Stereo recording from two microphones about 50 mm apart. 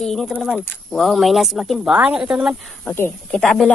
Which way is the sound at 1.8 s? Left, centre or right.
Centre.